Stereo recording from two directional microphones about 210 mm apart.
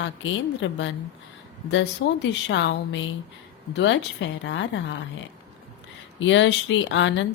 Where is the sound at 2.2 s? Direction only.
60° left (ahead or behind).